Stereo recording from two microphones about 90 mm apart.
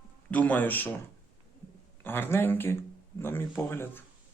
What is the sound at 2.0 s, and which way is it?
Speech, 25° left (ahead or behind).